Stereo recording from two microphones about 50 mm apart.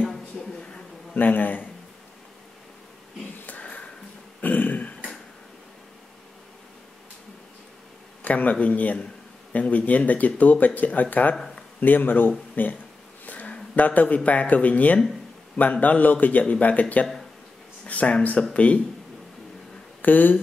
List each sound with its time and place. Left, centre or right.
1.1 s speech: left
3.4 s sniff: left
4.4 s a sound: left
8.2 s speech: left
13.2 s a sound: left
13.7 s speech: left
17.8 s speech: left
20.0 s speech: left